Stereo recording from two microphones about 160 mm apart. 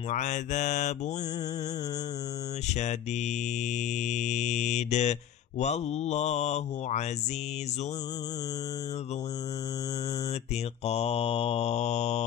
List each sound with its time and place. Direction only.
0.1 s speech: 50° left (ahead or behind)
2.7 s speech: 45° left (ahead or behind)
4.0 s speech: 45° left (ahead or behind)
10.9 s mantra: 40° left (ahead or behind)